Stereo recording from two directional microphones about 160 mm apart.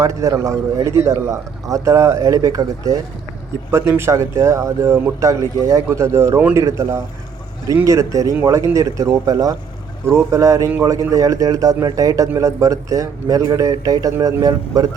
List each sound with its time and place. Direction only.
0.0 s a man's voice: 20° right (ahead or behind)